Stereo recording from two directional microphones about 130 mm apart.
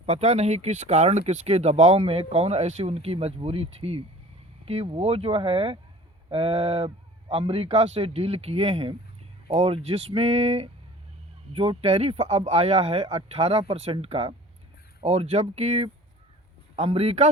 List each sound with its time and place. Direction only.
0.0 s speech: 55° right (ahead or behind)